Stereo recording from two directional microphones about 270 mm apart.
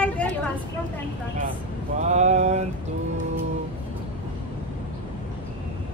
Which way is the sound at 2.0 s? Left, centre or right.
Right.